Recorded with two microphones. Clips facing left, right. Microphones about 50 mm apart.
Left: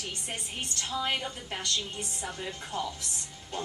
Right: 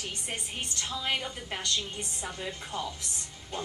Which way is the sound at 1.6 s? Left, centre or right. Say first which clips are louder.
Even; right.